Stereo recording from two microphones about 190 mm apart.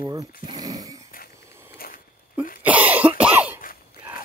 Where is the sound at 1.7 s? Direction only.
50° left (ahead or behind).